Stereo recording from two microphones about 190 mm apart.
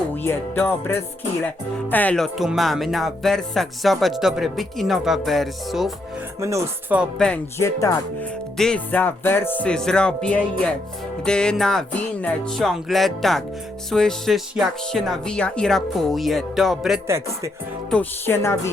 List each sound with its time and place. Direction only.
0.2 s music: 10° left (ahead or behind)
1.9 s speech: 10° left (ahead or behind)
6.4 s speech: 15° right (ahead or behind)
7.0 s speech: 5° left (ahead or behind)
7.6 s music: 15° left (ahead or behind)
8.5 s speech: 5° left (ahead or behind)
17.1 s speech: 15° right (ahead or behind)
17.9 s music: 15° left (ahead or behind)